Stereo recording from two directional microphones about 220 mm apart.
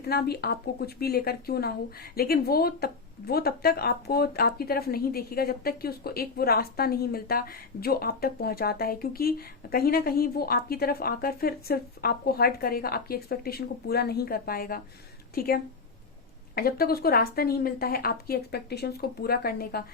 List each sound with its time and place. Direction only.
0.0 s a woman's voice: 45° left (ahead or behind)